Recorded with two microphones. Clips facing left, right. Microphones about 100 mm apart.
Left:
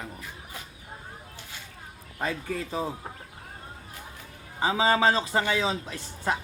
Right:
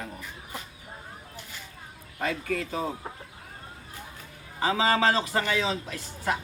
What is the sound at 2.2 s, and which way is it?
Speech, 20° left (ahead or behind).